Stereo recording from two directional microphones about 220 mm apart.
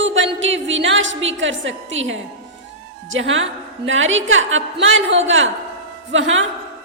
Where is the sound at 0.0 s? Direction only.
60° right (ahead or behind).